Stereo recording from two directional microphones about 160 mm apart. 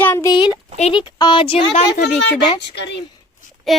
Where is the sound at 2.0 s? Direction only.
90° left.